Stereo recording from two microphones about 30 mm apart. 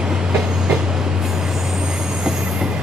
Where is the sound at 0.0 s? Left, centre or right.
Right.